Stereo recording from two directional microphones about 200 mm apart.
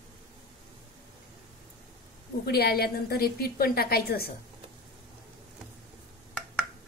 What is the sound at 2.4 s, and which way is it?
A woman's voice, 50° left (ahead or behind).